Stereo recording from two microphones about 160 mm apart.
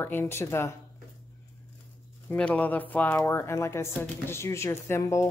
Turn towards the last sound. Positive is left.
turn(degrees=20)  # may be behind; listen again after turning